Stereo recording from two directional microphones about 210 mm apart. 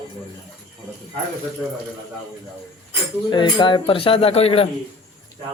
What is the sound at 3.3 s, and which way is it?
Speech, 20° left (ahead or behind).